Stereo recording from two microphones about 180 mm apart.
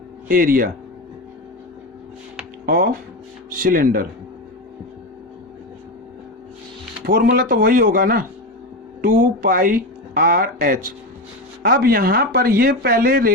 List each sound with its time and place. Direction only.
0.3 s speech: 50° right (ahead or behind)
2.6 s speech: 55° right (ahead or behind)
7.0 s speech: 55° right (ahead or behind)